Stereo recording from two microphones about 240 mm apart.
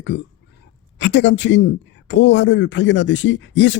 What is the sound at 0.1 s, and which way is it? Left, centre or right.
Speech, left.